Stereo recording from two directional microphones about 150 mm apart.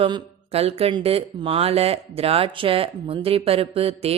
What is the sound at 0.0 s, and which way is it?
Speech, 40° right (ahead or behind).